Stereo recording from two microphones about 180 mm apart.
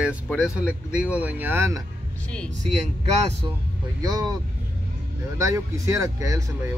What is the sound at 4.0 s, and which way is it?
Speech, 20° right (ahead or behind).